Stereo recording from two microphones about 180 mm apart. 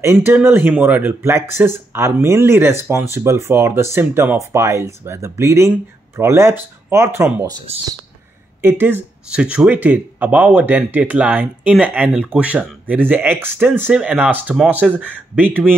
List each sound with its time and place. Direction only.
0.0 s speech: 15° right (ahead or behind)
8.5 s speech: 10° right (ahead or behind)